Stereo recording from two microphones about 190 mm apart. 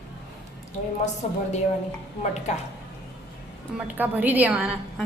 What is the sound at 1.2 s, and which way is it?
Speech, 40° left (ahead or behind).